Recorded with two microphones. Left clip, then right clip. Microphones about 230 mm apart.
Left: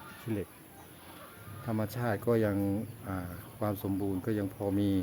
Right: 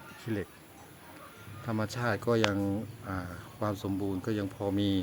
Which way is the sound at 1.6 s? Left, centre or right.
Centre.